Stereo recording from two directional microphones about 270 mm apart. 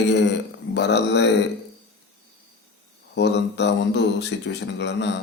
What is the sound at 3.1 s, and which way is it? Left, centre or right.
Speech, left.